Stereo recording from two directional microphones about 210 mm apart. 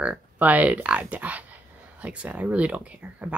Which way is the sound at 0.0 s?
5° right (ahead or behind).